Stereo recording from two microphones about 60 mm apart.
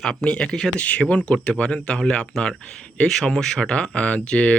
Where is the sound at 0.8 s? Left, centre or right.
Left.